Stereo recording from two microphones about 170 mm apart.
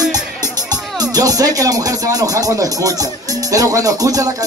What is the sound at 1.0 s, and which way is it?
Speech, 20° right (ahead or behind).